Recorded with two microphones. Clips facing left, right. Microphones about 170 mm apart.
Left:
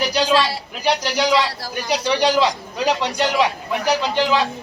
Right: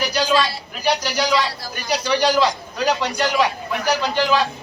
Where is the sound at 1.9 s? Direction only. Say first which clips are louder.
Even; 20° left (ahead or behind).